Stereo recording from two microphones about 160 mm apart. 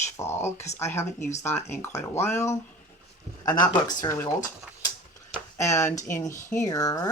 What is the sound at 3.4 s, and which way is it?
Speech, 25° left (ahead or behind).